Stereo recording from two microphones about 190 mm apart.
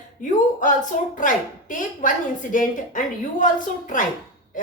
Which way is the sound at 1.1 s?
45° left (ahead or behind).